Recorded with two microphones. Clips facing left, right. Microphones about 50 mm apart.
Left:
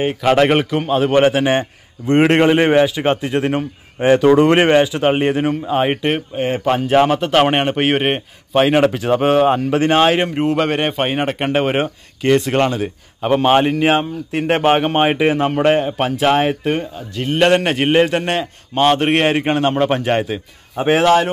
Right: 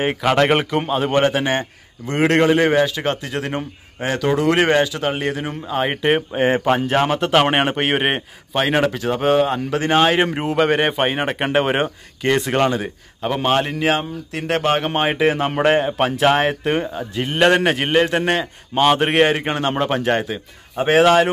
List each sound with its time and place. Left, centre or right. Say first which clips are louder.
0.3 s a man's voice: left 3 dB; centre; by 4.6 s left
4.6 s a man's voice: left 4 dB; centre
5.7 s a man's voice: left 2 dB; centre
6.5 s speech: left 5 dB; centre
7.0 s a man's voice: left 5 dB; centre
13.2 s a man's voice: left 5 dB; centre
16.8 s speech: right 2 dB; centre
17.3 s a man's voice: left 1 dB; centre
21.0 s speech: even; centre